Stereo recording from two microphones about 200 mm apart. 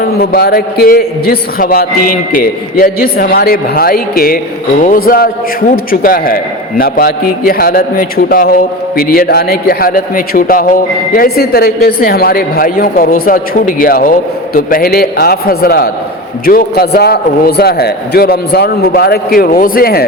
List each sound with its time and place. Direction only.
0.0 s a man's voice: 50° left (ahead or behind)